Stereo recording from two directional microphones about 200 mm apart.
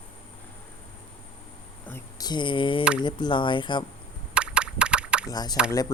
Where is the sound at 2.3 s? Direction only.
25° left (ahead or behind).